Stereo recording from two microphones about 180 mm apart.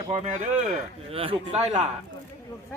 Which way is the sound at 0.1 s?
40° right (ahead or behind).